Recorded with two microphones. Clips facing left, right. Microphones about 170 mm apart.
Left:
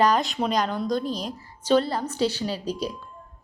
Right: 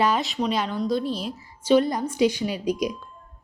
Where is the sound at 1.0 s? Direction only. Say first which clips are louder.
Right 1 dB; 40° left (ahead or behind).